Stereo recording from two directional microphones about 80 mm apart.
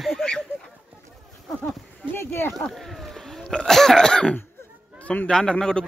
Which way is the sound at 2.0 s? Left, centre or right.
Left.